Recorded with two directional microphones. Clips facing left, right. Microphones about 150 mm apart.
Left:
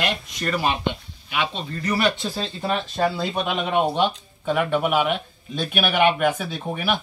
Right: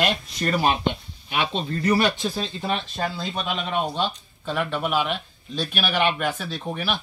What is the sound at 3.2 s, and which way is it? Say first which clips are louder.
Speech: left 4 dB; 20° left (ahead or behind).